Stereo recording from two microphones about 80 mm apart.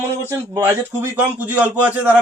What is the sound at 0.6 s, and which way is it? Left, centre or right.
A man's voice, right.